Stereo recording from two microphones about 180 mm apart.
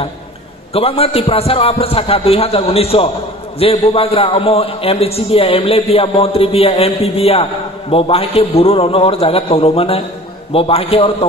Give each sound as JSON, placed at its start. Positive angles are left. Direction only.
{"t": 0.7, "sound": "a man's voice", "side_deg": 30}